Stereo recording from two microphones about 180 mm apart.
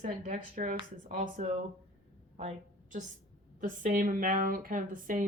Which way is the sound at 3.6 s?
50° right (ahead or behind).